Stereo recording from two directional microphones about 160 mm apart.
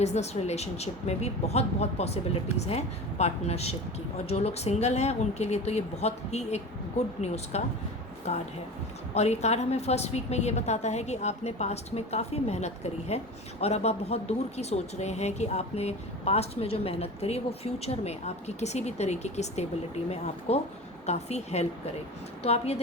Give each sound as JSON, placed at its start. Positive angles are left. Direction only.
{"t": 0.0, "sound": "a woman's voice", "side_deg": 45}